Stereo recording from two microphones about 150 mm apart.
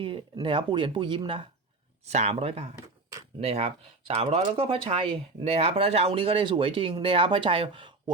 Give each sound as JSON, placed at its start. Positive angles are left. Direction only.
{"t": 0.0, "sound": "speech", "side_deg": -35}
{"t": 2.0, "sound": "speech", "side_deg": -45}